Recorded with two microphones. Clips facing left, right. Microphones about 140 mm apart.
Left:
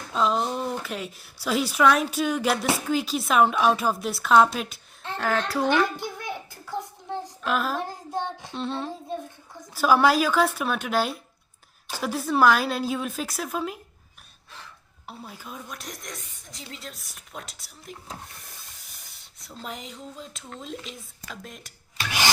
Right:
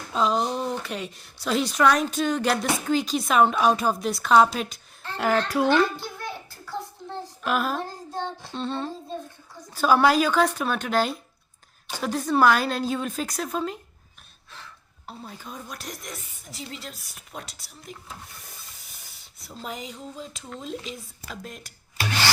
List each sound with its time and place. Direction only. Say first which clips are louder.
0.1 s speech: right 1 dB; centre (ahead or behind)
5.1 s speech: right 3 dB; 10° right (ahead or behind)
5.6 s a sound: right 2 dB; 15° left (ahead or behind)
7.4 s speech: right 1 dB; centre (ahead or behind)
7.8 s child singing: left 1 dB; 15° left (ahead or behind)
8.5 s speech: right 1 dB; centre (ahead or behind)
15.0 s speech: right 1 dB; 5° left (ahead or behind)
18.3 s a sound: right 1 dB; centre (ahead or behind)
20.6 s speech: right 3 dB; centre (ahead or behind)